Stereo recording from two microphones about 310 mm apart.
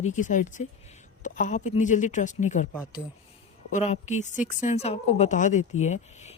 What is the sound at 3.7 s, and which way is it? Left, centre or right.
A woman's voice, left.